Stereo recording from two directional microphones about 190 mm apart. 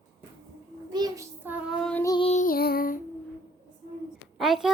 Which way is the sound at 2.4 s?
50° left (ahead or behind).